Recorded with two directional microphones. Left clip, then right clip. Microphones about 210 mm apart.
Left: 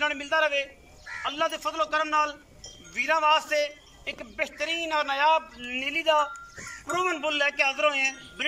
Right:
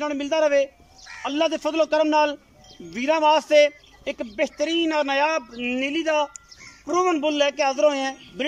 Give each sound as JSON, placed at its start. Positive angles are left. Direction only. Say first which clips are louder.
{"t": 0.0, "sound": "speech", "louder": "right 3 dB", "side_deg": -30}